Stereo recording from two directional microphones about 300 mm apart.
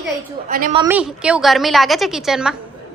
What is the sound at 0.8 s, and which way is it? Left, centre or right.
A woman's voice, centre.